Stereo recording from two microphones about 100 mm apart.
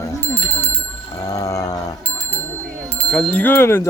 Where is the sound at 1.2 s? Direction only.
40° left (ahead or behind).